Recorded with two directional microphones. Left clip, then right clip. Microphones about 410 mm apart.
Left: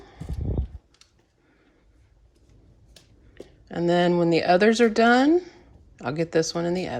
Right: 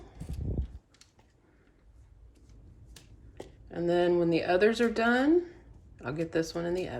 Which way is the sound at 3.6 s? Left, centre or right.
Centre.